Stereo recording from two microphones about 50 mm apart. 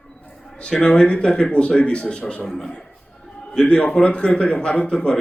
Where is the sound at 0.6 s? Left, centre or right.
Centre.